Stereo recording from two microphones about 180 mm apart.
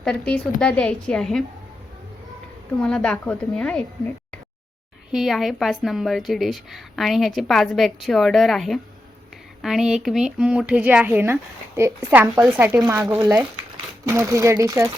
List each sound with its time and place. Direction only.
0.0 s a woman's voice: 5° left (ahead or behind)
2.8 s a woman's voice: 5° left (ahead or behind); by 14.8 s 15° right (ahead or behind)